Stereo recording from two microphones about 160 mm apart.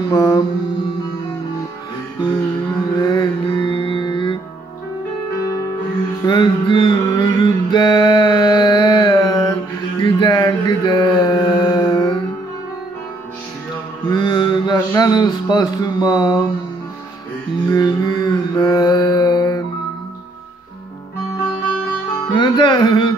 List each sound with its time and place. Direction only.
0.1 s music: 25° left (ahead or behind)
3.0 s music: 30° left (ahead or behind)
6.2 s mantra: 25° left (ahead or behind)
14.0 s a sound: 25° left (ahead or behind)
17.6 s carnatic music: 25° left (ahead or behind)
22.3 s music: 30° left (ahead or behind)